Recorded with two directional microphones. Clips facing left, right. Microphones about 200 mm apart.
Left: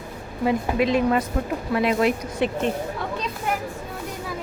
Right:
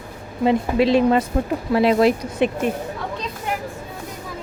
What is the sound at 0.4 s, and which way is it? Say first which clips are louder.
Speech: right 4 dB; 30° right (ahead or behind).